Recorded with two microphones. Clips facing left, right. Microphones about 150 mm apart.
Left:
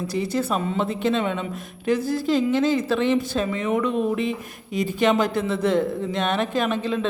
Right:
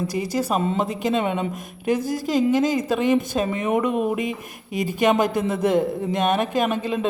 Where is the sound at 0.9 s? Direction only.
10° right (ahead or behind).